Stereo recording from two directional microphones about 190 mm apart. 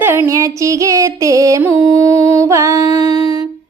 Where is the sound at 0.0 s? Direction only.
10° right (ahead or behind).